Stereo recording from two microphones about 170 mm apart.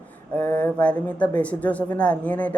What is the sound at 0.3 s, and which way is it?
A man's voice, 10° left (ahead or behind).